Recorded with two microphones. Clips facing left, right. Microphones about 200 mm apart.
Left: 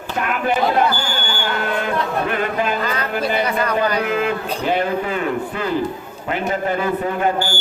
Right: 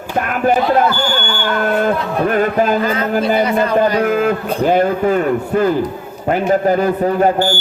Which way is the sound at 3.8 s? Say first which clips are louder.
Right 6 dB; 45° right (ahead or behind).